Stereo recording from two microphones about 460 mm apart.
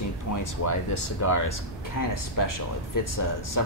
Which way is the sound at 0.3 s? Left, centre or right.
Left.